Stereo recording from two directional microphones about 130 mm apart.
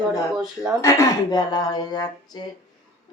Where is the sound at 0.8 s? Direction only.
20° left (ahead or behind).